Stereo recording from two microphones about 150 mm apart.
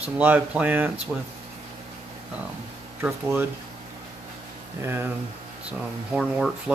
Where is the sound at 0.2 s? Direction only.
10° right (ahead or behind).